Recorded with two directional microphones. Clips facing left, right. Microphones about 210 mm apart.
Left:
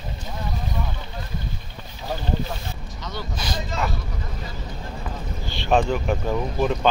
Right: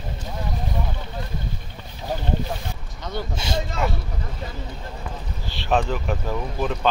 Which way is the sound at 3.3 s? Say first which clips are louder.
Right 2 dB; 25° right (ahead or behind).